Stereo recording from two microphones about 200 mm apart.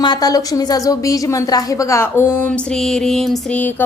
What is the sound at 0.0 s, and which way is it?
A woman's voice, 20° left (ahead or behind).